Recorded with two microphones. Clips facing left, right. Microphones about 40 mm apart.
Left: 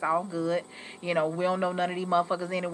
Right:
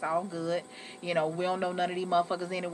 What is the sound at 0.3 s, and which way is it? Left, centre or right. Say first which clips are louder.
Speech: left 3 dB; centre.